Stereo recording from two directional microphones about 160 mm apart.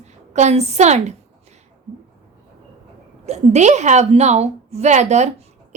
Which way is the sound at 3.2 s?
45° right (ahead or behind).